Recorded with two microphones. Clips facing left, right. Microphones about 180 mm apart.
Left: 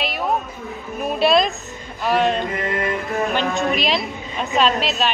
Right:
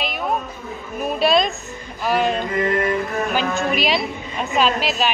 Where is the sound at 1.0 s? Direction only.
Centre (ahead or behind).